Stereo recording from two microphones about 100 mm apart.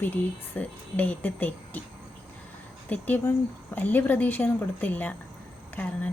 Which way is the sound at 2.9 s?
15° left (ahead or behind).